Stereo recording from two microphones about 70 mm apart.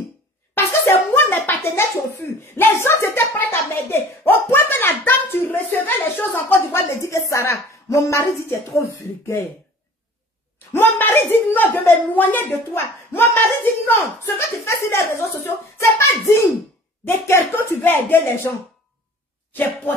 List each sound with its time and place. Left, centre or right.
0.6 s a sound: left
2.4 s a woman's voice: left
7.0 s a woman's voice: left
10.7 s a woman's voice: left